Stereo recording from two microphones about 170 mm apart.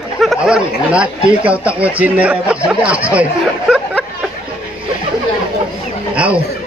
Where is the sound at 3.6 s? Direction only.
5° left (ahead or behind).